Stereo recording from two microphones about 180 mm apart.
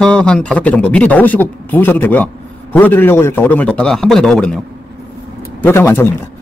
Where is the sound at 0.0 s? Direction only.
5° left (ahead or behind).